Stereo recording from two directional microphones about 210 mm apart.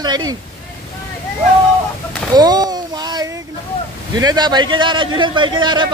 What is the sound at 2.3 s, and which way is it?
A child's voice, 20° right (ahead or behind).